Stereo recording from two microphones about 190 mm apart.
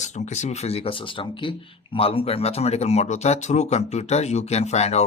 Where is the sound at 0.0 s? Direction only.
40° left (ahead or behind).